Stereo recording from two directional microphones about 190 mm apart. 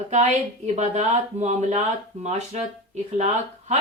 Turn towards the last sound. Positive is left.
turn(degrees=-35)  # may be behind; listen again after turning